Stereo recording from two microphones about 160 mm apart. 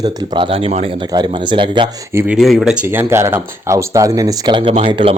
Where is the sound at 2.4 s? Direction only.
Centre (ahead or behind).